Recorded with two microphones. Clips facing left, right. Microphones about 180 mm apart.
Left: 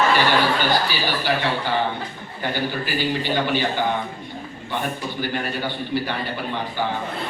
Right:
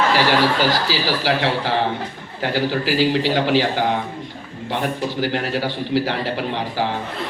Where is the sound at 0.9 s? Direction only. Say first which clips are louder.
Right 3 dB; 90° right.